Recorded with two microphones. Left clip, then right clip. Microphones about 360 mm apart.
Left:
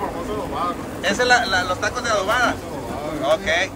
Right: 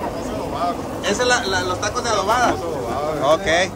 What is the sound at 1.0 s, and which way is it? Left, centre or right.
Speech, centre.